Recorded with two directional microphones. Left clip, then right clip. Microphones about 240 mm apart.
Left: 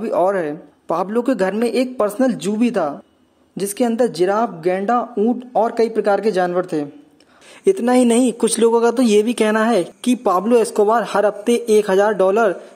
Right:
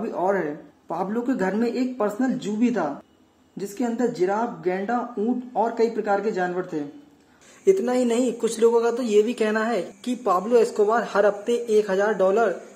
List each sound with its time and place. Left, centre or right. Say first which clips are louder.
0.0 s speech: left 7 dB; left